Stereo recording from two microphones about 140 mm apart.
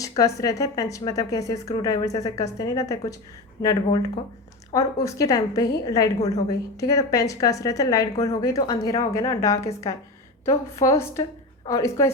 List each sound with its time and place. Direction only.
0.2 s a woman's voice: 25° left (ahead or behind)